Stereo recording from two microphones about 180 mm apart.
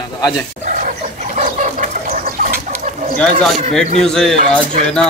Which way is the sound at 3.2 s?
Centre (ahead or behind).